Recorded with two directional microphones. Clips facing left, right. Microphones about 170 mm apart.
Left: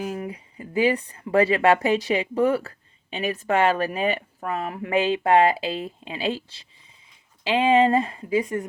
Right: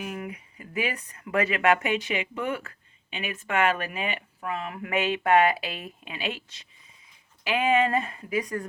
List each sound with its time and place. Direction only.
0.0 s speech: 30° left (ahead or behind)